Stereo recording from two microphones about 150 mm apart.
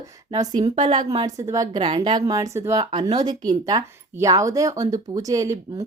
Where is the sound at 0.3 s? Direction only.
25° right (ahead or behind).